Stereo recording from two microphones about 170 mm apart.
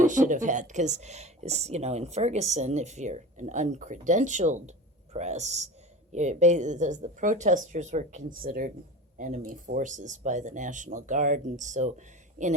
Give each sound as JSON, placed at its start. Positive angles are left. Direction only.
{"t": 0.0, "sound": "a man's voice", "side_deg": -50}